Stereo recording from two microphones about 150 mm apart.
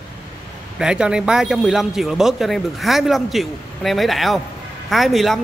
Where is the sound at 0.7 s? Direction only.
5° right (ahead or behind).